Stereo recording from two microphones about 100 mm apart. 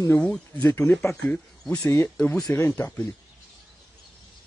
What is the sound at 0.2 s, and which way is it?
Speech, 10° left (ahead or behind).